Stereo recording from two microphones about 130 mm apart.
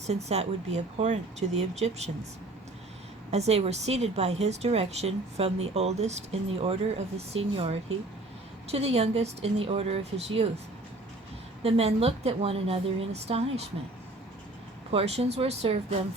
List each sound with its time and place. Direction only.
0.1 s speech: 55° right (ahead or behind)
3.3 s a woman's voice: 55° right (ahead or behind)
11.6 s a woman's voice: 50° right (ahead or behind)
14.8 s a woman's voice: 55° right (ahead or behind)